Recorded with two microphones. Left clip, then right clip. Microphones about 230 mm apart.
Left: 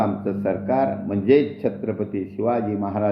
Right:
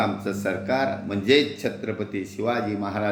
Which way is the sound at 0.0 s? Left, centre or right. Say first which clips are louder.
Left 2 dB; centre.